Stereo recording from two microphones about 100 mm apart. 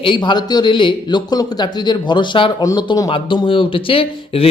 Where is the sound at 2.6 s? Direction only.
35° left (ahead or behind).